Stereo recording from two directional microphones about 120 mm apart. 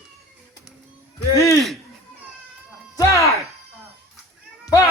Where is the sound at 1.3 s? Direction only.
25° left (ahead or behind).